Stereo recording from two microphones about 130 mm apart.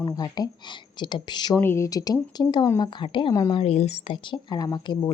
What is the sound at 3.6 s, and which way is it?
A woman's voice, 55° left (ahead or behind).